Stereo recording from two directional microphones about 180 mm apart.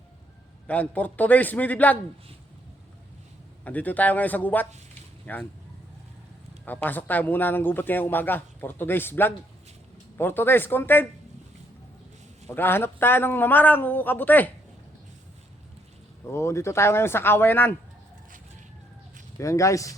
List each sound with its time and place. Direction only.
0.7 s speech: 10° left (ahead or behind)
3.6 s speech: 10° left (ahead or behind)
6.7 s speech: 10° left (ahead or behind)
12.5 s speech: 10° left (ahead or behind)
16.3 s speech: 15° left (ahead or behind)
19.4 s speech: 15° left (ahead or behind)